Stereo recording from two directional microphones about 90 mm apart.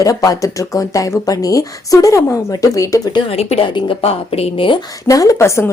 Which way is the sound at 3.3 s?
90° left.